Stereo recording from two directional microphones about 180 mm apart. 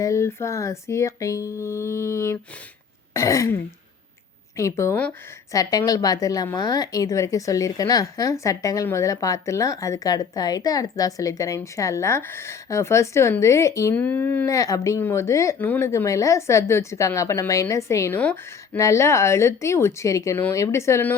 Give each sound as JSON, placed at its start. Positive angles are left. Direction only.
{"t": 0.0, "sound": "a woman's voice", "side_deg": 15}